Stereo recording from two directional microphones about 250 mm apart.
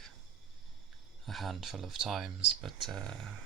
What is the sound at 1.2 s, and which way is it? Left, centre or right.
Speech, centre.